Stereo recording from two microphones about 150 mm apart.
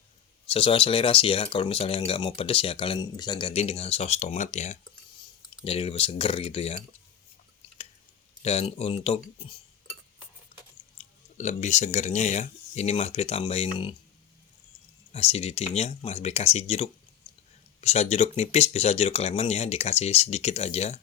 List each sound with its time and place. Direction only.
0.4 s speech: 35° left (ahead or behind)
8.4 s speech: 45° left (ahead or behind)
10.5 s a sound: 50° left (ahead or behind)
10.9 s speech: 50° left (ahead or behind)
15.1 s speech: 45° left (ahead or behind)